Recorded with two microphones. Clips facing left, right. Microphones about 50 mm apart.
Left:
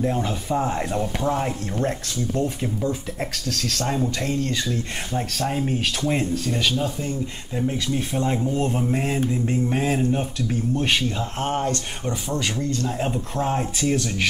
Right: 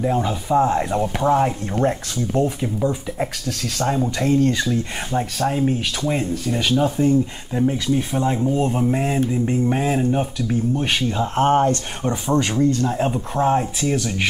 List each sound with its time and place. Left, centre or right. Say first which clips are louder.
0.0 s speech: right 3 dB; centre
0.9 s speech: right 6 dB; centre
5.1 s speech: right 5 dB; right
5.5 s speech: right 3 dB; centre
6.7 s speech: right 8 dB; right
7.5 s speech: right 5 dB; centre
11.3 s speech: right 10 dB; right
12.9 s speech: right 4 dB; centre